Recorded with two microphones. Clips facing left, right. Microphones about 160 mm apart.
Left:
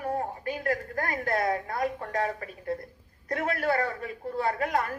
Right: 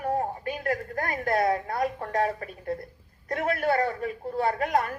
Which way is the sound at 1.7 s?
45° right (ahead or behind).